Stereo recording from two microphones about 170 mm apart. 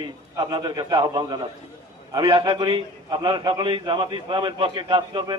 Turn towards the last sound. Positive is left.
turn(degrees=-25)  # may be behind; listen again after turning